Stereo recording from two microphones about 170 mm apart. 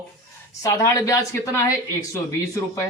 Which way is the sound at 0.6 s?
20° left (ahead or behind).